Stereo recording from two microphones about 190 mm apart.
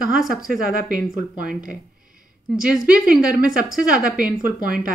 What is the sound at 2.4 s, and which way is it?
A woman's voice, 5° right (ahead or behind).